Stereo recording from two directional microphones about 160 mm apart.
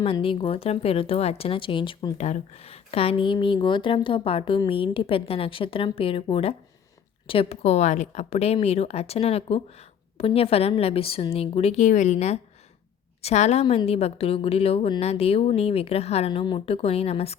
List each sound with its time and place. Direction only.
0.0 s a woman's voice: 35° left (ahead or behind)
2.1 s a woman's voice: 45° left (ahead or behind)